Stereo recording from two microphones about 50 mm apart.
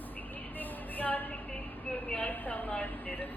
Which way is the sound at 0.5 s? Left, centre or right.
Left.